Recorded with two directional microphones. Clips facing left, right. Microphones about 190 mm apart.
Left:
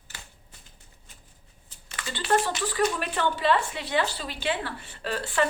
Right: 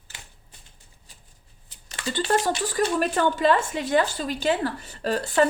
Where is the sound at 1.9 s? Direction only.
30° right (ahead or behind).